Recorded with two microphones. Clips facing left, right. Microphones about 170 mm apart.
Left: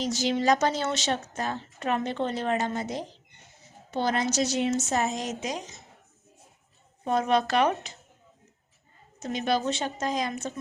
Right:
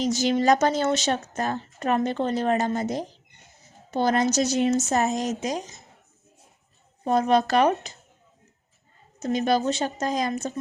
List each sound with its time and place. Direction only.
0.0 s a woman's voice: 50° right (ahead or behind)
7.0 s a woman's voice: 40° right (ahead or behind)
9.2 s a woman's voice: 40° right (ahead or behind)